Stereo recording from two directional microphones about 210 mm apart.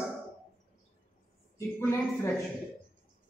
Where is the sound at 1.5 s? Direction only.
10° left (ahead or behind).